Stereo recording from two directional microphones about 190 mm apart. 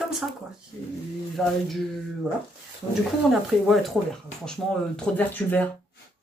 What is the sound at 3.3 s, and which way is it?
Speech, centre (ahead or behind).